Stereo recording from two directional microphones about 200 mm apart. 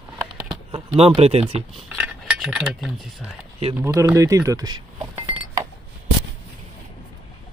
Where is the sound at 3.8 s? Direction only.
15° right (ahead or behind).